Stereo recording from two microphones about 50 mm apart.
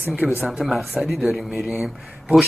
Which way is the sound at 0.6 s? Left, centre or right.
Centre.